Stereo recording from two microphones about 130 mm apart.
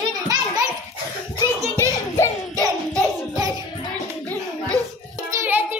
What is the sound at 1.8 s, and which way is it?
Music, 20° left (ahead or behind).